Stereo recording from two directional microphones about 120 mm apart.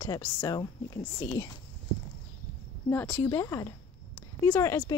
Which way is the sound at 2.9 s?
10° left (ahead or behind).